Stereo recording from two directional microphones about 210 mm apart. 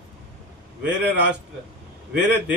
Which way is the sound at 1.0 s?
55° right (ahead or behind).